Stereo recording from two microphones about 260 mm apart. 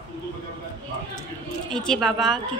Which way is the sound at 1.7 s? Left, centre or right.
Centre.